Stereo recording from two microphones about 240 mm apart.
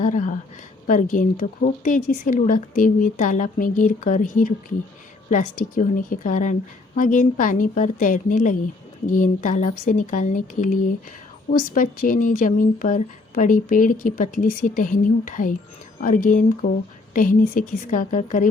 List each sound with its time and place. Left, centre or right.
0.0 s a woman's voice: left